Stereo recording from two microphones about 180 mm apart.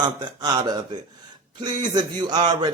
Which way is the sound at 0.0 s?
25° right (ahead or behind).